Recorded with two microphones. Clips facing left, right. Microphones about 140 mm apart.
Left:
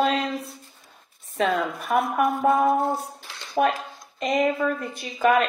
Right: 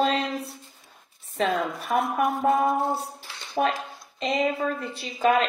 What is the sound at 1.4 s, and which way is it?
Speech, 50° left (ahead or behind).